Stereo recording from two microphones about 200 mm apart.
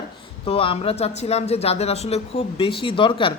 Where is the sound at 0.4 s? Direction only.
30° left (ahead or behind).